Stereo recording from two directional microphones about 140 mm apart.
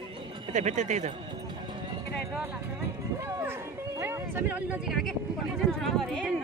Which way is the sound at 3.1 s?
20° right (ahead or behind).